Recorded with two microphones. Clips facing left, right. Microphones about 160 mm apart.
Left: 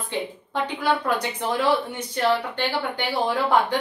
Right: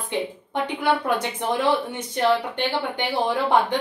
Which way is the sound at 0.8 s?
25° right (ahead or behind).